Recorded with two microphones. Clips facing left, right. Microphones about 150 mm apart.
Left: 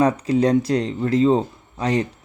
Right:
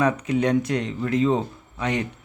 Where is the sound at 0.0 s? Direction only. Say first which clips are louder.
Left 4 dB; 35° left (ahead or behind).